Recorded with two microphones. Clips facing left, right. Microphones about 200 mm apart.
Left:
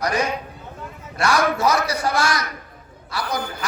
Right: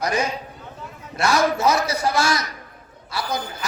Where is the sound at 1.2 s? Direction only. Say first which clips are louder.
Even; 25° right (ahead or behind).